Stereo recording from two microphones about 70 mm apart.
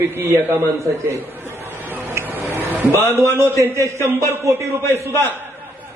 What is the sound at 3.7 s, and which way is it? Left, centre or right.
A man's voice, right.